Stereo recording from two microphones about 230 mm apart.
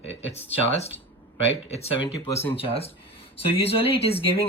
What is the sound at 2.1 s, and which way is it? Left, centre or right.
Speech, centre.